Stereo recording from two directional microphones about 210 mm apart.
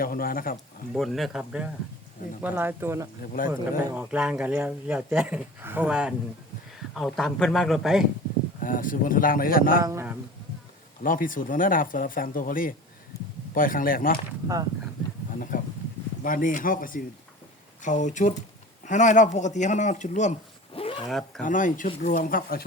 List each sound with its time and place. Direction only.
0.0 s speech: 45° left (ahead or behind)
0.9 s a man's voice: centre (ahead or behind)
8.6 s speech: 40° left (ahead or behind)
9.8 s speech: 10° right (ahead or behind)
11.0 s speech: 40° left (ahead or behind)
14.4 s speech: 15° right (ahead or behind)
15.4 s a sound: 40° left (ahead or behind)
16.2 s speech: 40° left (ahead or behind)
20.7 s wild animals: 25° left (ahead or behind)
21.1 s a man's voice: centre (ahead or behind)
21.4 s speech: 35° left (ahead or behind)